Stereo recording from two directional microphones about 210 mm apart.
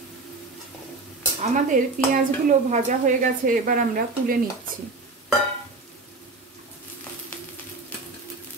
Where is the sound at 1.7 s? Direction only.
40° right (ahead or behind).